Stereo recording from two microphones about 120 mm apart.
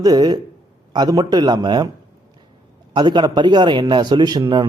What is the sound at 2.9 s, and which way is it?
Speech, 40° right (ahead or behind).